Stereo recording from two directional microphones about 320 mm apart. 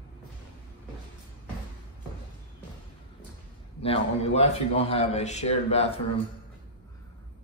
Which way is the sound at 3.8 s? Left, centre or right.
Centre.